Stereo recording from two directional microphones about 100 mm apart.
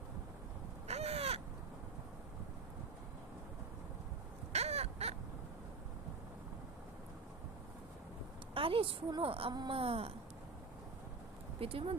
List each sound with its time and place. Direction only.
0.9 s crow: 90° right
4.5 s crow: 90° right
8.5 s a woman's voice: 65° right (ahead or behind)
9.3 s a woman's voice: 70° right (ahead or behind)
11.6 s a woman's voice: 70° right (ahead or behind)